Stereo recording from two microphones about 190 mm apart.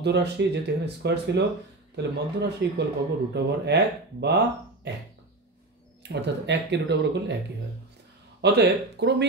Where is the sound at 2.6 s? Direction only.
65° right (ahead or behind).